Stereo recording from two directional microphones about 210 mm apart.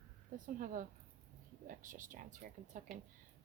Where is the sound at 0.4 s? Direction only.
40° right (ahead or behind).